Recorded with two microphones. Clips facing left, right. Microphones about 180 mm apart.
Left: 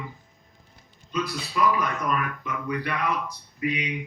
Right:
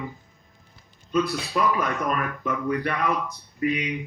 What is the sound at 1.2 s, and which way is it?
Speech, 55° right (ahead or behind).